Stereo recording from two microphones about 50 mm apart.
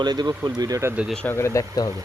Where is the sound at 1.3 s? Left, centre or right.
Left.